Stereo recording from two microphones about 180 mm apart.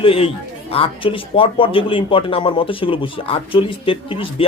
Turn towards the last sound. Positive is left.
turn(degrees=30)  # may be behind; listen again after turning